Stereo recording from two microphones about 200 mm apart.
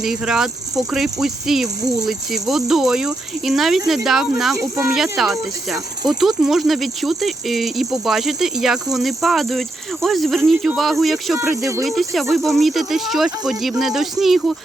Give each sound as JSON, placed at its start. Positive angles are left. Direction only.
{"t": 0.0, "sound": "speech", "side_deg": 0}
{"t": 11.5, "sound": "speech", "side_deg": -15}
{"t": 11.9, "sound": "speech", "side_deg": 0}